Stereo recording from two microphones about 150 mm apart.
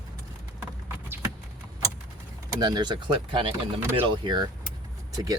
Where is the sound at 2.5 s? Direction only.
30° right (ahead or behind).